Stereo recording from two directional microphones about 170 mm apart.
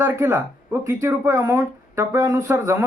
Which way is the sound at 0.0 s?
15° right (ahead or behind).